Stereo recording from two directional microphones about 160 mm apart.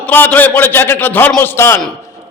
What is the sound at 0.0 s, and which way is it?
A man's voice, 10° left (ahead or behind).